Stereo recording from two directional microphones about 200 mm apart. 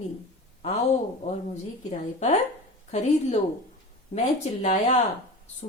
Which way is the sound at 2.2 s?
35° left (ahead or behind).